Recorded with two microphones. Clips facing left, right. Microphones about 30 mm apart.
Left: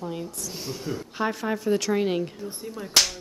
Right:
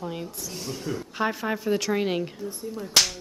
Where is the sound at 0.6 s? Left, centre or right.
Centre.